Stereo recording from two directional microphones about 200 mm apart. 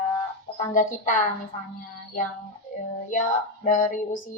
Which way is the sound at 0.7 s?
40° left (ahead or behind).